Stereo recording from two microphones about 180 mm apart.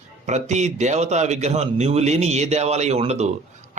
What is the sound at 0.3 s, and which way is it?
A man's voice, 40° right (ahead or behind).